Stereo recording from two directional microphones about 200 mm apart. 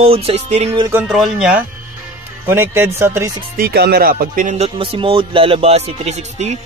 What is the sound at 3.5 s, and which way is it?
Speech, 50° right (ahead or behind).